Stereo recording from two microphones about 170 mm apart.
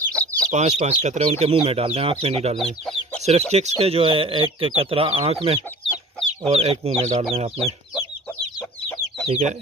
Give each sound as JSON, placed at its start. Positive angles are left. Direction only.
{"t": 0.0, "sound": "chicken", "side_deg": 5}
{"t": 0.5, "sound": "speech", "side_deg": -40}